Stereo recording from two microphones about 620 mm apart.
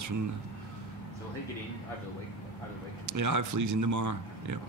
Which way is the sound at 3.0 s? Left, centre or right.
Right.